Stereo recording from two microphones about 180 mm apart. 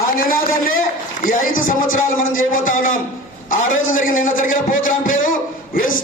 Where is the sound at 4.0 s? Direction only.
50° left (ahead or behind).